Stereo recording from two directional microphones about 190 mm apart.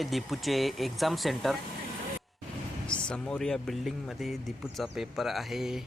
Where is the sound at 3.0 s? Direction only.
5° left (ahead or behind).